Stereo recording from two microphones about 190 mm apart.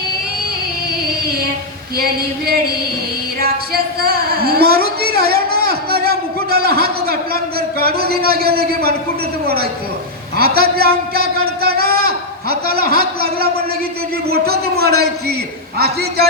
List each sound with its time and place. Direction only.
3.4 s a sound: 55° right (ahead or behind)
7.8 s a man's voice: 55° right (ahead or behind)
10.3 s a man's voice: 55° right (ahead or behind)